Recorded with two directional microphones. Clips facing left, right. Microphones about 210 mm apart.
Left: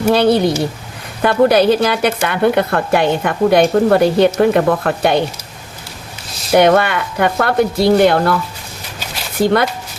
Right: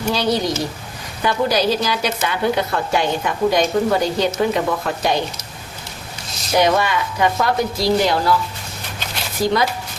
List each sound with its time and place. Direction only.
0.1 s a woman's voice: 55° left (ahead or behind)
6.5 s a woman's voice: 60° left (ahead or behind)
9.4 s a woman's voice: 60° left (ahead or behind)